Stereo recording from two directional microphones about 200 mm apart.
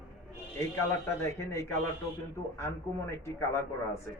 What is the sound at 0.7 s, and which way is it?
Speech, 15° left (ahead or behind).